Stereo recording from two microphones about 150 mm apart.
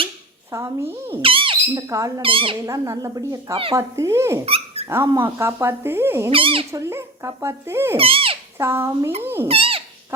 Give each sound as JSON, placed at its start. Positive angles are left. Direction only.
{"t": 0.5, "sound": "speech", "side_deg": -20}
{"t": 1.2, "sound": "speech", "side_deg": -35}
{"t": 1.7, "sound": "a woman's voice", "side_deg": -20}
{"t": 2.2, "sound": "speech", "side_deg": -35}
{"t": 2.6, "sound": "a woman's voice", "side_deg": -20}
{"t": 3.5, "sound": "speech", "side_deg": -40}
{"t": 3.8, "sound": "a woman's voice", "side_deg": -20}
{"t": 4.4, "sound": "dog", "side_deg": -40}
{"t": 4.9, "sound": "speech", "side_deg": -20}
{"t": 6.3, "sound": "speech", "side_deg": -35}
{"t": 6.7, "sound": "speech", "side_deg": -20}
{"t": 7.9, "sound": "speech", "side_deg": -40}
{"t": 8.5, "sound": "speech", "side_deg": -15}
{"t": 9.5, "sound": "speech", "side_deg": -40}